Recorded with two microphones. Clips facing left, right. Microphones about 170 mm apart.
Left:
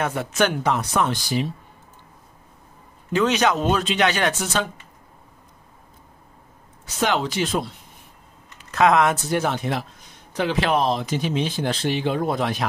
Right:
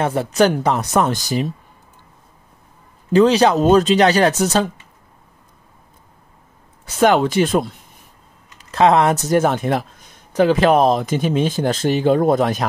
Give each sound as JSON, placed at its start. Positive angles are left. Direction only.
{"t": 0.0, "sound": "speech", "side_deg": -35}
{"t": 3.1, "sound": "speech", "side_deg": -35}
{"t": 7.0, "sound": "speech", "side_deg": -50}
{"t": 8.5, "sound": "speech", "side_deg": -30}